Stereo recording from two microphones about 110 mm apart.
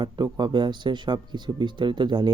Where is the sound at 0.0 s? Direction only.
40° right (ahead or behind).